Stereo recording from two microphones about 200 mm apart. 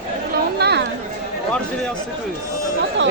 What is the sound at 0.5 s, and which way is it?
Chatter, 55° right (ahead or behind).